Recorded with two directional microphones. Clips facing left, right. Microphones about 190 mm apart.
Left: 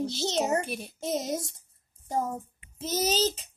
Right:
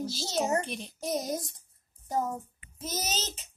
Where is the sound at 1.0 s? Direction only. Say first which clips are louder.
Left 1 dB; 25° left (ahead or behind).